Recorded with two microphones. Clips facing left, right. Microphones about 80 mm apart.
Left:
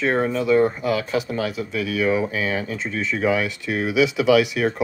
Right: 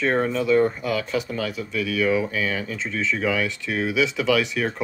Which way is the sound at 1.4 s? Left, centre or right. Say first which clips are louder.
Left 2 dB; left.